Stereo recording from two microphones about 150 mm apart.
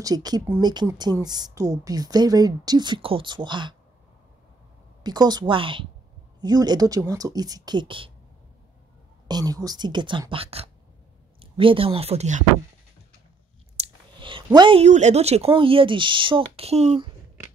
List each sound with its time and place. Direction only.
0.0 s a woman's voice: 25° right (ahead or behind)
5.0 s a woman's voice: 30° right (ahead or behind)
9.3 s a woman's voice: 25° right (ahead or behind); by 12.4 s 50° right (ahead or behind)
13.7 s clicking: 35° right (ahead or behind)
14.8 s speech: 50° right (ahead or behind)